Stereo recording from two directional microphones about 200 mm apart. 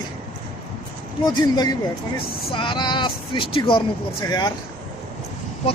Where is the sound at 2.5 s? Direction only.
25° left (ahead or behind).